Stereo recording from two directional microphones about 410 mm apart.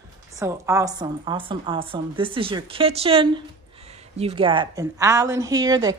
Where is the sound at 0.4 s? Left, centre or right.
Centre.